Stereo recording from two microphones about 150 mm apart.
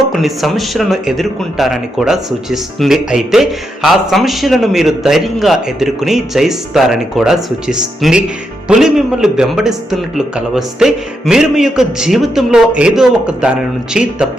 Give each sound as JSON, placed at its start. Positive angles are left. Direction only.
{"t": 0.0, "sound": "speech", "side_deg": 0}